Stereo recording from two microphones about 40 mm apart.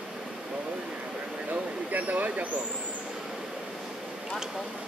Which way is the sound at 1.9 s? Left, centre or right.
Right.